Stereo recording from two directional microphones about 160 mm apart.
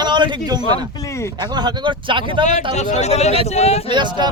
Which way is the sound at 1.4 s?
25° right (ahead or behind).